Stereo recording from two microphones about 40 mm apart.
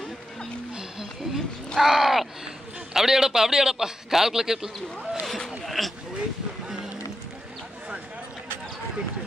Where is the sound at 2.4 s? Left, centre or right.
Centre.